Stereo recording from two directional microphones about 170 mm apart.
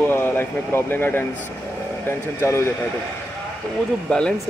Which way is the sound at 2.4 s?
15° left (ahead or behind).